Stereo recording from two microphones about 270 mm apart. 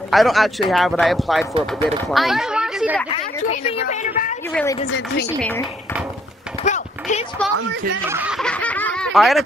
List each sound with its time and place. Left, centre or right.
0.1 s speech: centre
3.4 s a woman's voice: left
4.5 s speech: centre
4.8 s speech: left
5.4 s speech: centre
6.6 s a sound: left
8.1 s snicker: centre